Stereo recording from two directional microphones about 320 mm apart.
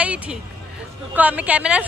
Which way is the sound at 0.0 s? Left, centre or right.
Centre.